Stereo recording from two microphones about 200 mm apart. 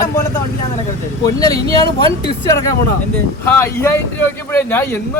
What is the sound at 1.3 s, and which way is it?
Speech, 15° left (ahead or behind).